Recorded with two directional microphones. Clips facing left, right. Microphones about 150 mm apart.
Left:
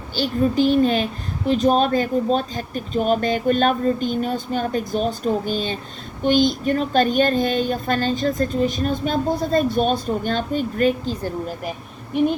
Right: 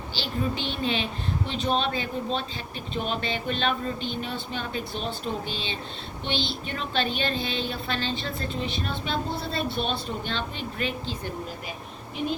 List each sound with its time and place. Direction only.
0.2 s a woman's voice: 40° left (ahead or behind)